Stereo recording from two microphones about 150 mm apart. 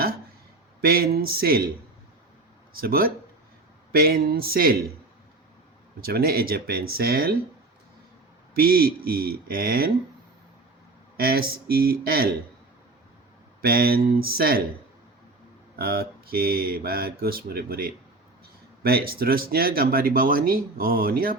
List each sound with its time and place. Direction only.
0.8 s speech: 90° right
2.7 s speech: 75° right (ahead or behind)
3.9 s speech: 90° right
6.0 s speech: 90° right
8.5 s speech: 80° right
11.2 s speech: 90° right
13.6 s speech: 90° right
15.7 s speech: 90° right